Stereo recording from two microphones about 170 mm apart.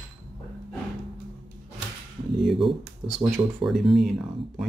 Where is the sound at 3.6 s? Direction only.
Centre (ahead or behind).